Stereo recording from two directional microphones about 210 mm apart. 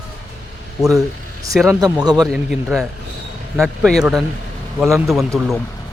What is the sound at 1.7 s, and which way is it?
Speech, 20° right (ahead or behind).